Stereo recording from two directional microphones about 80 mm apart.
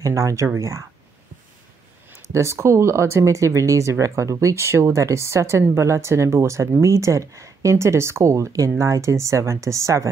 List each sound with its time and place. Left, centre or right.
0.0 s speech: right
2.0 s speech: right